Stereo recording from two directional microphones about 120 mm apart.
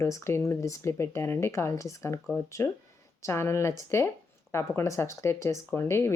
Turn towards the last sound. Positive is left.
turn(degrees=20)  # may be behind; listen again after turning